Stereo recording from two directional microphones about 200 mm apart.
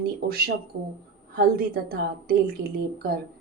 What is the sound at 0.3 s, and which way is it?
A woman's voice, 50° right (ahead or behind).